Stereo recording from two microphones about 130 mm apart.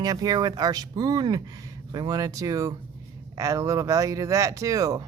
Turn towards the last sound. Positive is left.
turn(degrees=-25)  # may be behind; listen again after turning